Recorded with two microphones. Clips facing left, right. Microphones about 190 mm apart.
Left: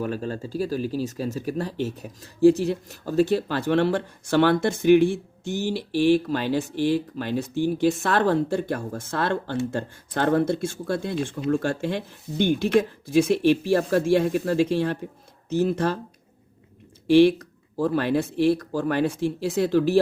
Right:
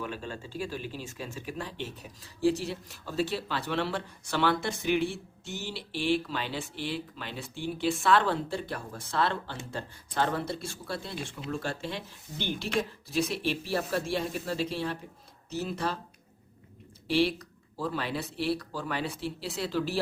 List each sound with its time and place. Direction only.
0.0 s speech: 40° left (ahead or behind)
17.2 s speech: 50° left (ahead or behind)